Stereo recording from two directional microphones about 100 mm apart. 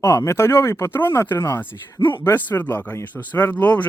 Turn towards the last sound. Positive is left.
turn(degrees=15)  # may be behind; listen again after turning